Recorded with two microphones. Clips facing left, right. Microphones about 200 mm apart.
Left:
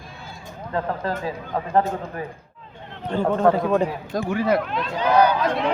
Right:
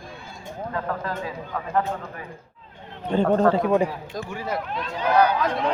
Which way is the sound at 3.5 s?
15° right (ahead or behind).